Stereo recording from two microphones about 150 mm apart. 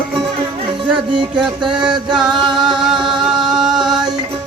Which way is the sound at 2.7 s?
5° right (ahead or behind).